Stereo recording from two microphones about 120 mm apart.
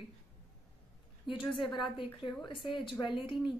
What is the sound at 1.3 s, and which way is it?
A woman's voice, 45° left (ahead or behind).